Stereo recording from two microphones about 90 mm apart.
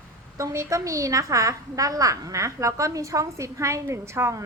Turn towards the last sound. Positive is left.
turn(degrees=-30)  # may be behind; listen again after turning